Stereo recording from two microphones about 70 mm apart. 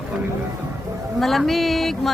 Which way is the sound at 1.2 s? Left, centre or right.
Centre.